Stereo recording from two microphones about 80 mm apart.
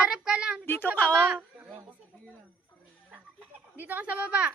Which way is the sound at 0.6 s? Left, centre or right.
Left.